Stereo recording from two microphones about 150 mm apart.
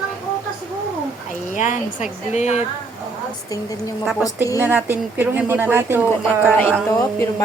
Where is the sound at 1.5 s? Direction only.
55° left (ahead or behind).